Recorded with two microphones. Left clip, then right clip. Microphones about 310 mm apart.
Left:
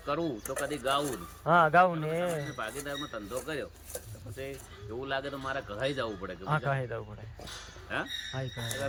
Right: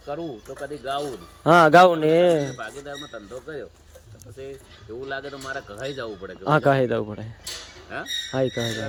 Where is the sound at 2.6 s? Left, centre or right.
Centre.